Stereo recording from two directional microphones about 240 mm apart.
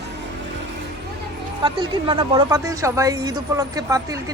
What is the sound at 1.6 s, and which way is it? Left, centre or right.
Speech, centre.